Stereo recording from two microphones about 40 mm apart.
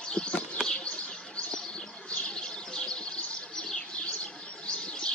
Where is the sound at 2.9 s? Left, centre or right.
Left.